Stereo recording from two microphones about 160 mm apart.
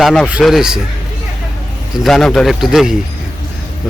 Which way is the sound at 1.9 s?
Centre (ahead or behind).